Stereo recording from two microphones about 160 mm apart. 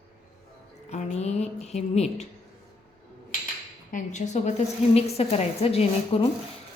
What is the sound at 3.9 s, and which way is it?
A woman's voice, 50° left (ahead or behind).